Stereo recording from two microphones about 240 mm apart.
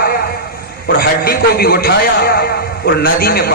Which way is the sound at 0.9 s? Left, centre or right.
Left.